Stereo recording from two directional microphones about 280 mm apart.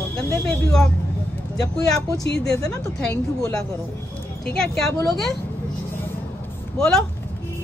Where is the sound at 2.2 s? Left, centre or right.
Left.